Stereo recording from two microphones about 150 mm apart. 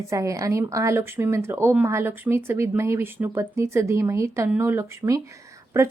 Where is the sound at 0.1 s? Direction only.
20° right (ahead or behind).